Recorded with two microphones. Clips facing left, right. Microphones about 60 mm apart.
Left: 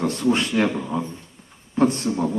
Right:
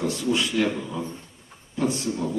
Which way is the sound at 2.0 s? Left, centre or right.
Left.